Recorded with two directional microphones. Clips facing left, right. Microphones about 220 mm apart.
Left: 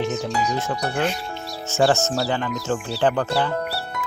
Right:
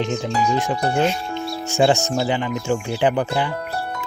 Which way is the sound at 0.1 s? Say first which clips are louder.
Right 2 dB; 20° left (ahead or behind).